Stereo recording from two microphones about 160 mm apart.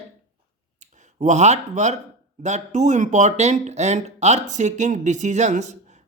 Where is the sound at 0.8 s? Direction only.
50° right (ahead or behind).